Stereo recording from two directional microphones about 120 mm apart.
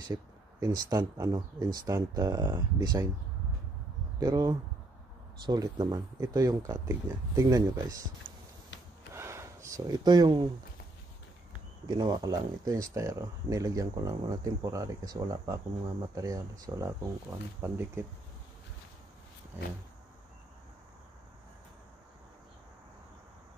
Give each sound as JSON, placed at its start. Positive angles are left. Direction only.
{"t": 0.1, "sound": "speech", "side_deg": -30}
{"t": 4.2, "sound": "speech", "side_deg": -35}
{"t": 9.1, "sound": "a sound", "side_deg": -20}
{"t": 11.8, "sound": "speech", "side_deg": -35}
{"t": 17.6, "sound": "speech", "side_deg": -20}